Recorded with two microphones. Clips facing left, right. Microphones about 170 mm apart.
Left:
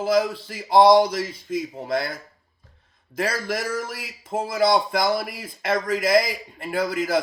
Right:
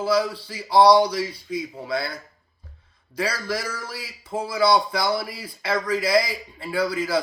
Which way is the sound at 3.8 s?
20° left (ahead or behind).